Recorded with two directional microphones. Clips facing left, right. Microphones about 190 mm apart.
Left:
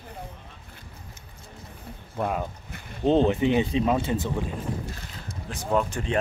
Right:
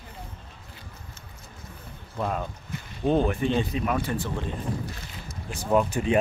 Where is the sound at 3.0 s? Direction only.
20° left (ahead or behind).